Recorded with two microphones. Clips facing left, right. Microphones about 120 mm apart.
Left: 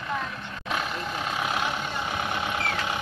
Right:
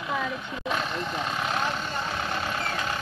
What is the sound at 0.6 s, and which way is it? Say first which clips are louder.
Vehicle: right 1 dB; 5° left (ahead or behind).